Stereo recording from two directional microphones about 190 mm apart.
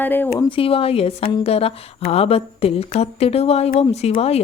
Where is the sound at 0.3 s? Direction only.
25° left (ahead or behind).